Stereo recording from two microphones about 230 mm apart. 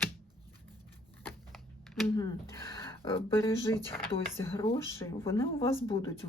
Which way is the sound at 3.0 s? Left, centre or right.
Centre.